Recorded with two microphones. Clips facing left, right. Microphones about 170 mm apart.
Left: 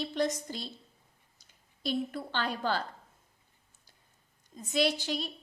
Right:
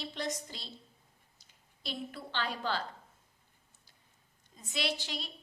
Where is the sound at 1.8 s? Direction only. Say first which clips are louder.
Left 8 dB; 45° left (ahead or behind).